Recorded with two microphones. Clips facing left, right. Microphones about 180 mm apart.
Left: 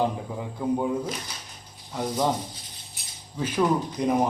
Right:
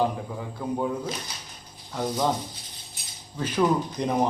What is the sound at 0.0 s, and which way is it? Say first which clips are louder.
A man's voice: even; 15° left (ahead or behind).